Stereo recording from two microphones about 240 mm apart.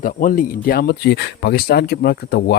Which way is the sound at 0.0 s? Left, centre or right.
Left.